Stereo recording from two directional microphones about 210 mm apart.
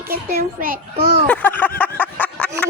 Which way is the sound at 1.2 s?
5° left (ahead or behind).